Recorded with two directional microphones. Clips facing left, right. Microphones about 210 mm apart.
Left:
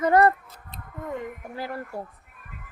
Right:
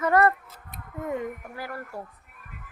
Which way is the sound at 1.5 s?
25° left (ahead or behind).